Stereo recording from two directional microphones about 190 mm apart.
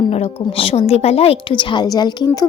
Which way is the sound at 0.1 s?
30° left (ahead or behind).